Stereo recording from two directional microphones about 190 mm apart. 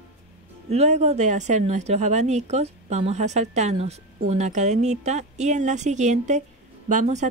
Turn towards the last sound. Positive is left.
turn(degrees=-40)  # may be behind; listen again after turning